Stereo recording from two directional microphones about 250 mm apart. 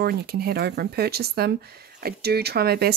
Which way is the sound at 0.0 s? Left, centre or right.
Right.